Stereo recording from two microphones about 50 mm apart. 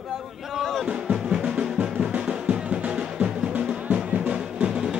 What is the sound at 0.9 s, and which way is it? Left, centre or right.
Music, right.